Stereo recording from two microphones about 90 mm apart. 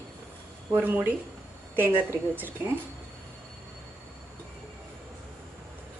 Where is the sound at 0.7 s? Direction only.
20° right (ahead or behind).